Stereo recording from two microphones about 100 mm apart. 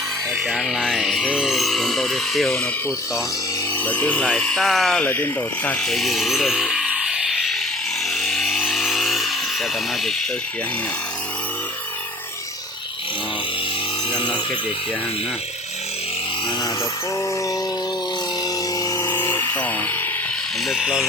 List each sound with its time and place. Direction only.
0.4 s speech: centre (ahead or behind)
3.8 s speech: 15° left (ahead or behind)
5.0 s speech: 20° left (ahead or behind)
5.9 s music: centre (ahead or behind)
8.1 s vehicle: 5° left (ahead or behind)
14.1 s music: 55° left (ahead or behind)
18.8 s music: 35° left (ahead or behind)
19.1 s a sound: 25° left (ahead or behind)
20.7 s speech: 5° right (ahead or behind)